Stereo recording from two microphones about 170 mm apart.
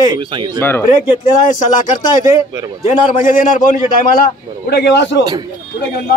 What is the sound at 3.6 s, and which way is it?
A man's voice, 55° left (ahead or behind).